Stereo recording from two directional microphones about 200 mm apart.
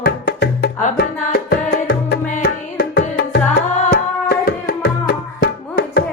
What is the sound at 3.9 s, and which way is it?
Music, 50° left (ahead or behind).